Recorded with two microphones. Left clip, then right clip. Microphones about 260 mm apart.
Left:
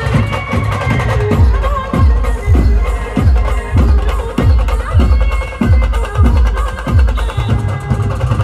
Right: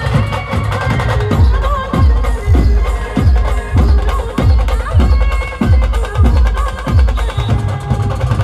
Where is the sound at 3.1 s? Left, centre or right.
Right.